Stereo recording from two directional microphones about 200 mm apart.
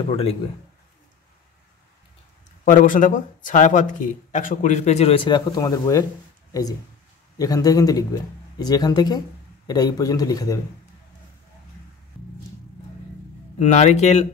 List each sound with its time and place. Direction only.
0.0 s speech: 30° left (ahead or behind)
2.6 s speech: 40° left (ahead or behind); by 6.0 s 15° left (ahead or behind)
7.3 s a man's voice: 20° left (ahead or behind)
13.6 s speech: 35° left (ahead or behind)